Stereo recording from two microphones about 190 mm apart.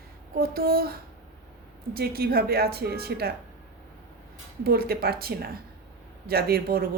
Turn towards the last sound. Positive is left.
turn(degrees=-55)  # may be behind; listen again after turning